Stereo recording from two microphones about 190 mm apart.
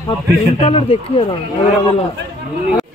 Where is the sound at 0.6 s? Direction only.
30° left (ahead or behind).